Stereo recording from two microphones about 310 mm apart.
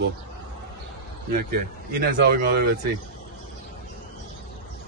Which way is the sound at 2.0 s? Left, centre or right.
Right.